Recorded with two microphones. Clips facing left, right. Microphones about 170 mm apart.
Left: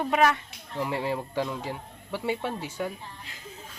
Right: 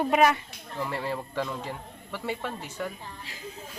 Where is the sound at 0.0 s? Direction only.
10° right (ahead or behind).